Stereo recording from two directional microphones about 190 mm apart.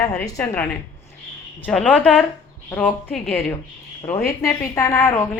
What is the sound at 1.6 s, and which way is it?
A woman's voice, 10° left (ahead or behind).